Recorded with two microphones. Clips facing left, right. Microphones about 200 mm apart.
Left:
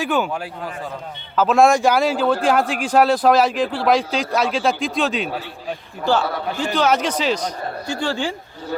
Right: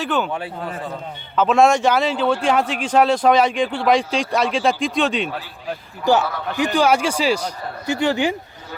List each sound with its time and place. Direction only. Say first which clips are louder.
0.0 s speech: left 1 dB; 10° left (ahead or behind)
1.4 s speech: even; 5° left (ahead or behind)
6.1 s speech: right 2 dB; 15° right (ahead or behind)